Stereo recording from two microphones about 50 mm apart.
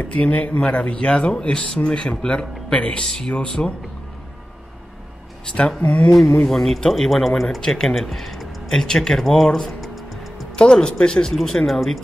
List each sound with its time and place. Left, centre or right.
0.0 s speech: left
5.8 s speech: left
6.3 s speech: centre
6.6 s speech: centre
8.7 s speech: centre
10.5 s speech: centre
11.3 s speech: centre